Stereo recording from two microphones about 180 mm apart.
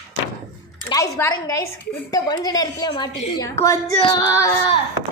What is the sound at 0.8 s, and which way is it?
A woman's voice, 20° left (ahead or behind).